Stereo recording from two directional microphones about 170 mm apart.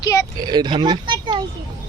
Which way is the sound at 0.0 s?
15° left (ahead or behind).